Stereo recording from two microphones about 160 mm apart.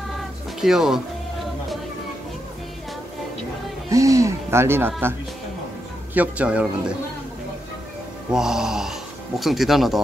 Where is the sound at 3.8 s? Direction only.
20° right (ahead or behind).